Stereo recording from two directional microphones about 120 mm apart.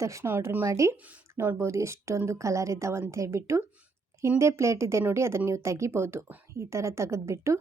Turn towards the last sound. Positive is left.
turn(degrees=-25)  # may be behind; listen again after turning